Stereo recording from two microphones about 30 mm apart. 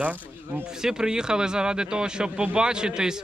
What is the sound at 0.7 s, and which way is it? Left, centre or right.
Speech, right.